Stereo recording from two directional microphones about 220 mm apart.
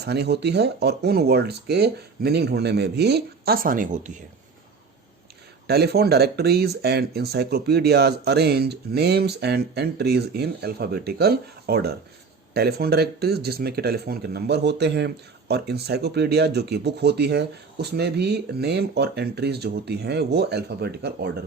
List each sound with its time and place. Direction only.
0.0 s speech: 50° right (ahead or behind)
5.6 s speech: 45° right (ahead or behind)